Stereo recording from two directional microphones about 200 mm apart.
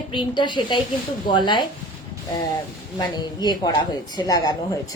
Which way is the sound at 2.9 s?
20° left (ahead or behind).